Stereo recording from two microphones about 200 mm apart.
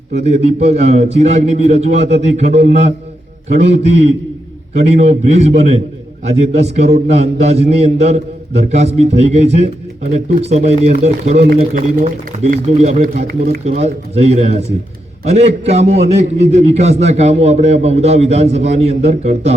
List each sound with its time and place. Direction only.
0.1 s a man's voice: 35° right (ahead or behind)
4.9 s a man's voice: 35° right (ahead or behind)